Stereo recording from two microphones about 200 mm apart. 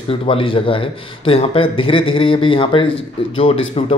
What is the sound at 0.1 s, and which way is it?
Speech, 25° left (ahead or behind).